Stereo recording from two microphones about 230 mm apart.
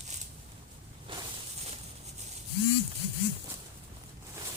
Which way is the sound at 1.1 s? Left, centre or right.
Right.